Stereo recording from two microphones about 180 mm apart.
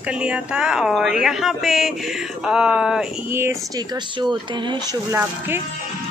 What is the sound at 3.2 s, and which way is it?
Speech, 15° right (ahead or behind).